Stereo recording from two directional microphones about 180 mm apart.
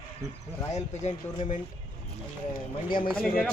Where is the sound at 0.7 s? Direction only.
40° left (ahead or behind).